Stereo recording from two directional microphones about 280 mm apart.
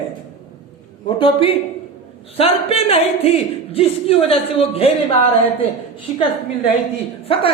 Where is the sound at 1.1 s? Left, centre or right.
Centre.